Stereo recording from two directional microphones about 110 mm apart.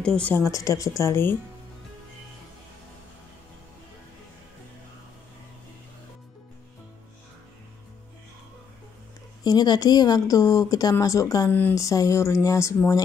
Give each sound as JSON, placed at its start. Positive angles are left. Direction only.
{"t": 0.0, "sound": "a woman's voice", "side_deg": 5}
{"t": 0.3, "sound": "speech", "side_deg": 30}
{"t": 9.4, "sound": "speech", "side_deg": 40}